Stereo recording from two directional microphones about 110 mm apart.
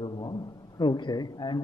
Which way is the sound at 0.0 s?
45° left (ahead or behind).